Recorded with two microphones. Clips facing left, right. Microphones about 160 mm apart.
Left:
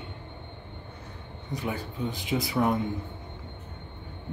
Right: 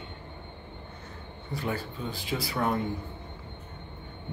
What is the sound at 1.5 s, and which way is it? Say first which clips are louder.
Speech: even; 15° left (ahead or behind).